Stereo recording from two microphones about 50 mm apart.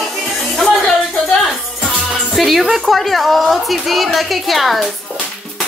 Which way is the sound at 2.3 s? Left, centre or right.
Centre.